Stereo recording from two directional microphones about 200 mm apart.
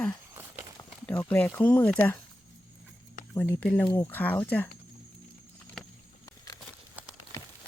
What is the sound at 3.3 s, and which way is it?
Speech, 10° left (ahead or behind).